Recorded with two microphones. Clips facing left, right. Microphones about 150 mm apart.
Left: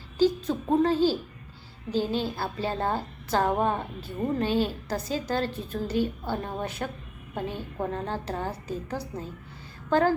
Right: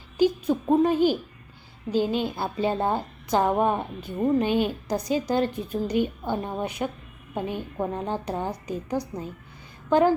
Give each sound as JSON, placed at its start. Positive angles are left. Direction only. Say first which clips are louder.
{"t": 0.2, "sound": "a woman's voice", "louder": "right 2 dB", "side_deg": -15}